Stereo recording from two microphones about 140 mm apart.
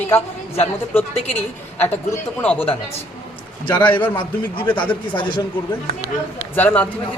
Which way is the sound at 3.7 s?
10° left (ahead or behind).